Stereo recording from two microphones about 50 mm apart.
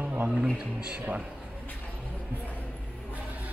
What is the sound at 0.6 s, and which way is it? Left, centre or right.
Speech, centre.